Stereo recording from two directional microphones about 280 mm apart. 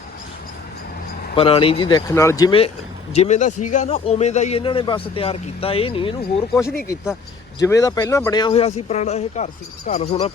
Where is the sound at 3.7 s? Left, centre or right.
Left.